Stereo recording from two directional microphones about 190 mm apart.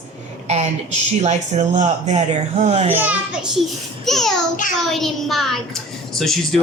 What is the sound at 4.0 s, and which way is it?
Speech, centre (ahead or behind).